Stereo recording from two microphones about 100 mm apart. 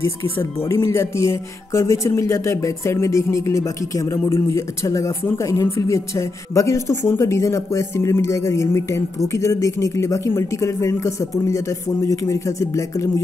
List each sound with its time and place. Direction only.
0.7 s speech: 30° left (ahead or behind)